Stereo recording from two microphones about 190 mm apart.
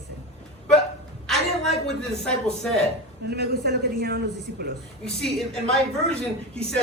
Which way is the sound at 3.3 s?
55° right (ahead or behind).